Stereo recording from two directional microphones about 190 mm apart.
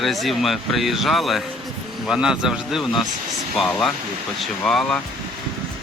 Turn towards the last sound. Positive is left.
turn(degrees=5)  # may be behind; listen again after turning